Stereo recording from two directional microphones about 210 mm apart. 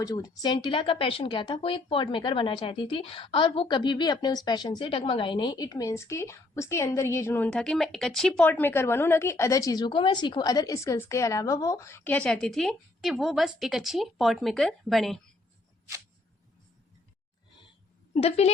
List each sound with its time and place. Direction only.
0.0 s a woman's voice: 15° left (ahead or behind); by 15.2 s centre (ahead or behind)
18.1 s a woman's voice: 30° left (ahead or behind)